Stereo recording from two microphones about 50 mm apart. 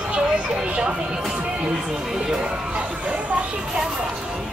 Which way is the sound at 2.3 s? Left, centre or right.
Right.